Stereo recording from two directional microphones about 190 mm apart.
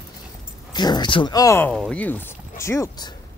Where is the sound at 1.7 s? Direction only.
5° left (ahead or behind).